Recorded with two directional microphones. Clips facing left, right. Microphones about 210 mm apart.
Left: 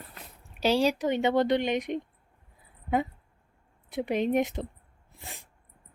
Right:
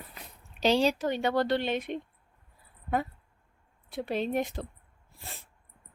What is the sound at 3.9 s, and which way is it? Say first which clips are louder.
Speech: left 4 dB; 15° left (ahead or behind).